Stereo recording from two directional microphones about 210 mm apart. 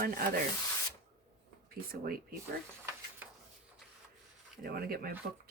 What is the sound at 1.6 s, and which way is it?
Speech, 45° right (ahead or behind).